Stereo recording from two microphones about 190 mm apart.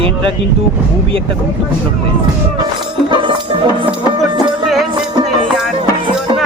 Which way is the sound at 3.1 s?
25° right (ahead or behind).